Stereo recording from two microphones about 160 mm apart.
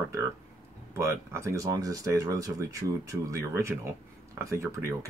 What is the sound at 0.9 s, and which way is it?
Speech, 15° right (ahead or behind).